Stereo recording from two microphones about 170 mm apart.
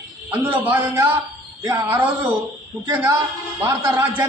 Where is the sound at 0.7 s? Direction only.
10° right (ahead or behind).